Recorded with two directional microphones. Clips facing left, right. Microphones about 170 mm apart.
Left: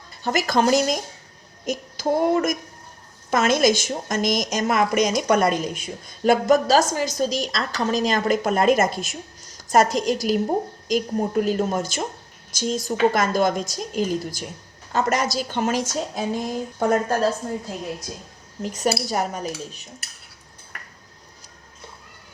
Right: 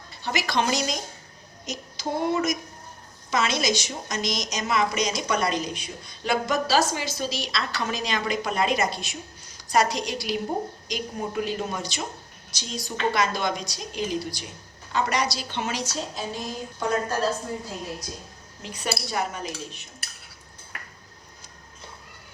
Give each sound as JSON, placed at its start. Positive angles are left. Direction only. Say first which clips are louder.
{"t": 0.2, "sound": "a woman's voice", "louder": "left 5 dB", "side_deg": 45}
{"t": 1.6, "sound": "a sound", "louder": "left 8 dB", "side_deg": 50}
{"t": 3.2, "sound": "a woman's voice", "louder": "left 6 dB", "side_deg": 50}
{"t": 18.6, "sound": "a woman's voice", "louder": "left 8 dB", "side_deg": 45}